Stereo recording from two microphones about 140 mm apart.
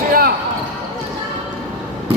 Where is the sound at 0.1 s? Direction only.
90° right.